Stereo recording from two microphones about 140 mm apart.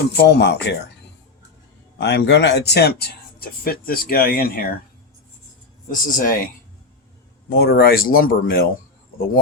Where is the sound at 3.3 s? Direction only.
90° left.